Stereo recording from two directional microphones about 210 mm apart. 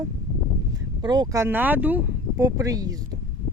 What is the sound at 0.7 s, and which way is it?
Speech, 20° right (ahead or behind).